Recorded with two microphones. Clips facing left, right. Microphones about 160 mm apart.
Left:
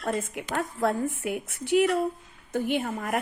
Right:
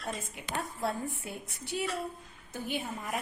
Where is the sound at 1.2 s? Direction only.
80° left.